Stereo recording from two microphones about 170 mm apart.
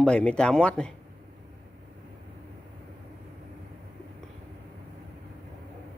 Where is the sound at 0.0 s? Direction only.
5° left (ahead or behind).